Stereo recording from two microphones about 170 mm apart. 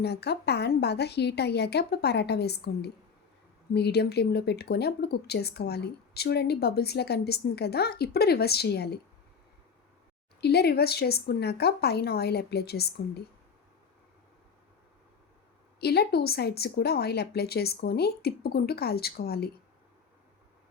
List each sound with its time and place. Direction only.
0.0 s speech: 75° left (ahead or behind)
10.4 s speech: 70° left (ahead or behind)
15.8 s speech: 70° left (ahead or behind)